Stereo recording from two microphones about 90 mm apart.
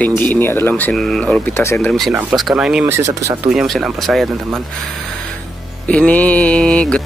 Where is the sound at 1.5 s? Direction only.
30° left (ahead or behind).